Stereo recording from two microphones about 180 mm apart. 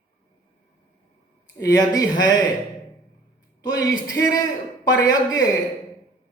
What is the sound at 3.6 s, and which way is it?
Speech, 20° left (ahead or behind).